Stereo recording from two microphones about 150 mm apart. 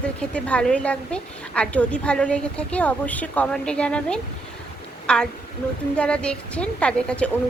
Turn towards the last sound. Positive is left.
turn(degrees=5)  # may be behind; listen again after turning